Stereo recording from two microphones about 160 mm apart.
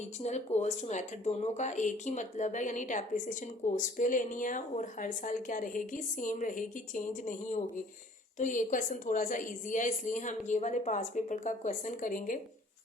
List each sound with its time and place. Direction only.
0.2 s speech: 45° left (ahead or behind)